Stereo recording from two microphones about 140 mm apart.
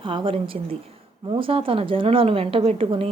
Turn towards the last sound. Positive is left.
turn(degrees=-40)  # may be behind; listen again after turning